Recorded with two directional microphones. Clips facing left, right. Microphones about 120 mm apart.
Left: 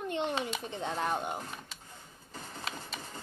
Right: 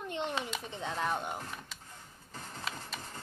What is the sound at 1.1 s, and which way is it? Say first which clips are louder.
Speech: left 2 dB; 10° left (ahead or behind).